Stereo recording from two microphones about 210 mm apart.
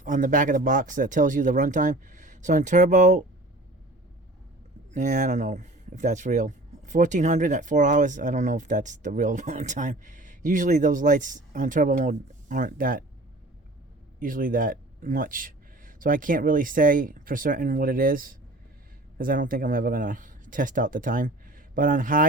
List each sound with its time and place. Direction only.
0.0 s speech: 40° right (ahead or behind)
4.9 s speech: 35° right (ahead or behind)
14.2 s speech: 40° right (ahead or behind)